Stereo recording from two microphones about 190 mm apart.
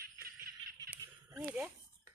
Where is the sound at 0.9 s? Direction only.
10° right (ahead or behind).